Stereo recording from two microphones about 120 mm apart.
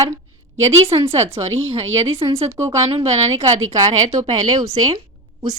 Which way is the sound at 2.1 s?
55° right (ahead or behind).